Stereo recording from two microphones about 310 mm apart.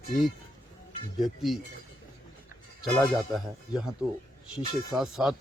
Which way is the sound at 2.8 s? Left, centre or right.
Centre.